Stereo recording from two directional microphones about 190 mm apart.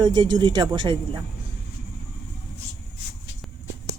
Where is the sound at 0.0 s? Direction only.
25° right (ahead or behind).